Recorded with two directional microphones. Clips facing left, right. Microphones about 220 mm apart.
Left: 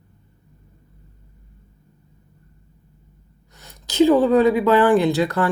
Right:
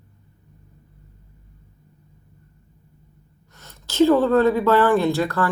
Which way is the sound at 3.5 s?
15° left (ahead or behind).